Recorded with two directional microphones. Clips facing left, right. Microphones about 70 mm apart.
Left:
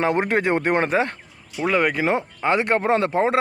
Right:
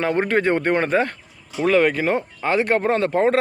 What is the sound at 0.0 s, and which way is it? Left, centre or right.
A man's voice, centre.